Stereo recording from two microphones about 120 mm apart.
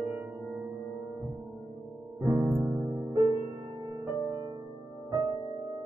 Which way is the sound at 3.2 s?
30° right (ahead or behind).